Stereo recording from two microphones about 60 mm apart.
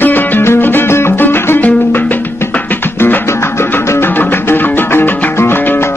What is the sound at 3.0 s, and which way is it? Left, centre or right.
Music, left.